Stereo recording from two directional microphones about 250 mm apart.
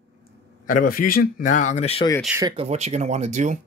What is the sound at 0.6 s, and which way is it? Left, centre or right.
A man's voice, left.